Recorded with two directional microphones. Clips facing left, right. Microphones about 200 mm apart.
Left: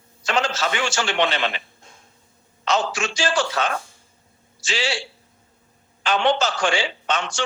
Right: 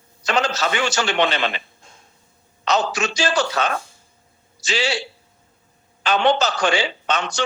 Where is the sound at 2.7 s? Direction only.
40° right (ahead or behind).